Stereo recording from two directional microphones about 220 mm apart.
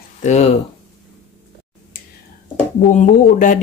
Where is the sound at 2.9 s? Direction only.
35° left (ahead or behind).